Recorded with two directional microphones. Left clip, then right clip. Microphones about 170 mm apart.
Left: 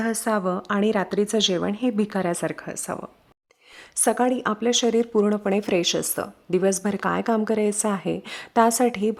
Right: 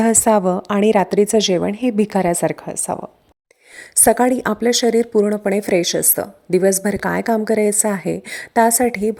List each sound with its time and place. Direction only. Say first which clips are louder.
0.0 s a woman's voice: right 9 dB; 30° right (ahead or behind); by 9.1 s 15° right (ahead or behind)